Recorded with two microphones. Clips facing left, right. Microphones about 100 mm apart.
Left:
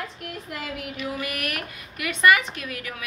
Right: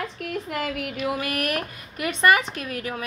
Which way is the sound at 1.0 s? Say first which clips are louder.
Right 4 dB; 40° right (ahead or behind).